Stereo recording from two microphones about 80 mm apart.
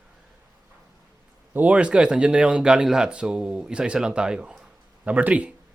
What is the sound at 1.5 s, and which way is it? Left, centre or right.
Speech, centre.